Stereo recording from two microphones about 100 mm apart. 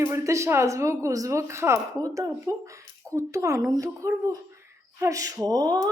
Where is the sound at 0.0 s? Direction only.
30° right (ahead or behind).